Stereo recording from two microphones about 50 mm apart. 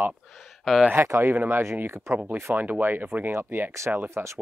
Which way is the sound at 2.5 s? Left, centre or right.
Right.